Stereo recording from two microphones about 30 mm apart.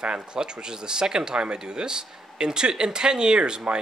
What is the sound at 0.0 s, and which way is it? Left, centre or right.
Speech, right.